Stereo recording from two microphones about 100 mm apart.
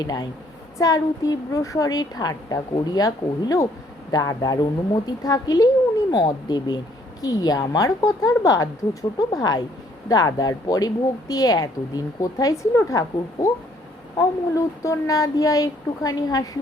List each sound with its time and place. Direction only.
0.0 s speech: 40° left (ahead or behind)